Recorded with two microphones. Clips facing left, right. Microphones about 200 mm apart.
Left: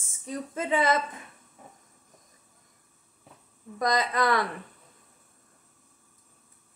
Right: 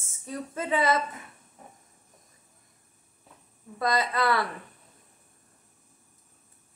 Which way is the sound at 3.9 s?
20° left (ahead or behind).